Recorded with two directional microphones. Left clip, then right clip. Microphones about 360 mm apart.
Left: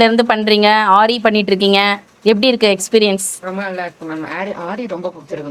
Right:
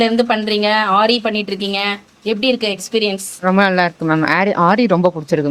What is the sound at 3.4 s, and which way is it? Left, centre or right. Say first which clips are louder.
A woman's voice: right 9 dB; right.